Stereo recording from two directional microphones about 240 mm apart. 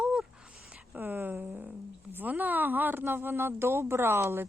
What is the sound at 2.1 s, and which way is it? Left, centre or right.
Speech, centre.